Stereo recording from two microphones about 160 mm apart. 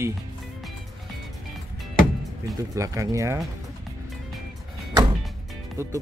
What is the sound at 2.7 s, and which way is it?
Speech, 20° right (ahead or behind).